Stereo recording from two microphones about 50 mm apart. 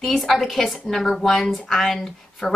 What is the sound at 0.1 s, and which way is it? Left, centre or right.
A woman's voice, centre.